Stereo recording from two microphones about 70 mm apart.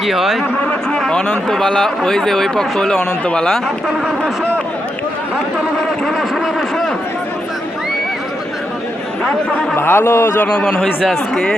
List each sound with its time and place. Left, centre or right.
0.0 s speech: centre
0.6 s a sound: centre
0.9 s a sound: centre
1.5 s speech: centre
6.1 s speech: centre
9.7 s a man's voice: left
10.4 s speech: centre